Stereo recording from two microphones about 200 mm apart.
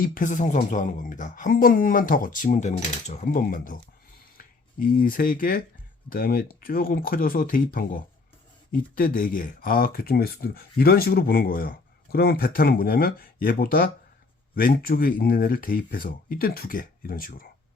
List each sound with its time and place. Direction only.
0.0 s speech: 40° left (ahead or behind)